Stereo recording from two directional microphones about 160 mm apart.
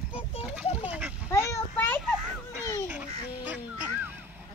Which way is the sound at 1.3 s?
15° left (ahead or behind).